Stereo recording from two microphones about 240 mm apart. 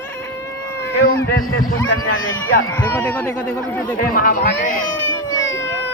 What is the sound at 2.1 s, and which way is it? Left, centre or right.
Speech, left.